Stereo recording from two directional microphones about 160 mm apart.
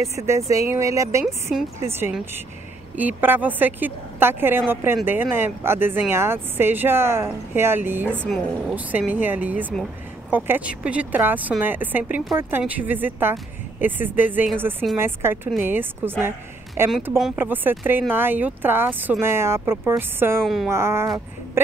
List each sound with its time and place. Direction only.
0.0 s speech: 20° right (ahead or behind)
1.2 s a woman's voice: centre (ahead or behind)
3.0 s speech: 10° right (ahead or behind)
20.4 s a woman's voice: centre (ahead or behind)
20.7 s speech: 15° right (ahead or behind)